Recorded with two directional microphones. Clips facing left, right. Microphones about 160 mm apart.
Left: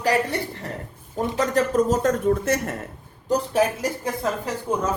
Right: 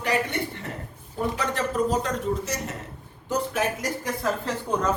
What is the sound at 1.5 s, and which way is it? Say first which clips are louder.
Speech: left 6 dB; 45° left (ahead or behind).